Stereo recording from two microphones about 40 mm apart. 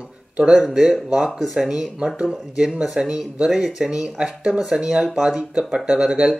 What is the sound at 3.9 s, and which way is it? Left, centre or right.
Speech, right.